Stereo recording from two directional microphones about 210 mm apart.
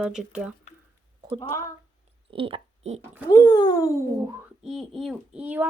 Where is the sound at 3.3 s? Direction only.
20° left (ahead or behind).